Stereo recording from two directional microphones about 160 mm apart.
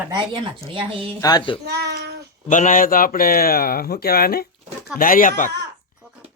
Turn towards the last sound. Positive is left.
turn(degrees=60)  # may be behind; listen again after turning